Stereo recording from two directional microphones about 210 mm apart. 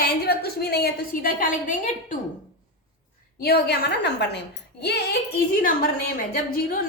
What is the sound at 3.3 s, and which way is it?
A woman's voice, 50° left (ahead or behind).